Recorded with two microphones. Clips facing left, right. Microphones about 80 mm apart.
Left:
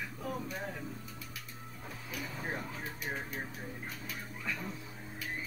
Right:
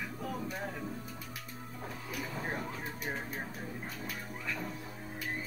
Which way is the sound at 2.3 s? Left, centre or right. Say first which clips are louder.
Right 2 dB; centre.